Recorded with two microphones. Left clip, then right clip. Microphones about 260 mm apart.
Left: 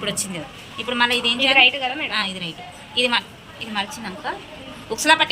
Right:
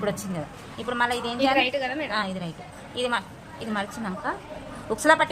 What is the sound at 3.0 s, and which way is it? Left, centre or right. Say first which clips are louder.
A woman's voice: left 7 dB; right.